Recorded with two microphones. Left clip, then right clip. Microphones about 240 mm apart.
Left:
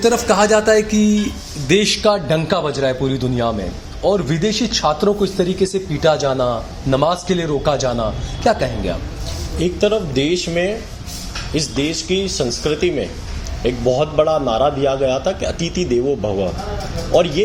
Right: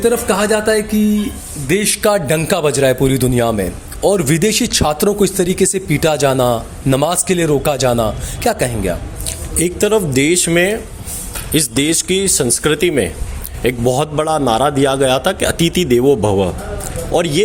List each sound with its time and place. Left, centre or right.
0.0 s speech: centre
1.9 s a man's voice: right